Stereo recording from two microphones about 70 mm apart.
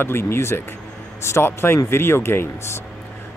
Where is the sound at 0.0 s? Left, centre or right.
Left.